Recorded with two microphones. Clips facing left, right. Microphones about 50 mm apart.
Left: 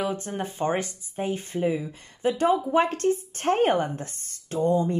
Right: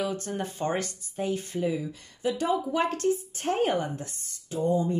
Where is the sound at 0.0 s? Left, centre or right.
Left.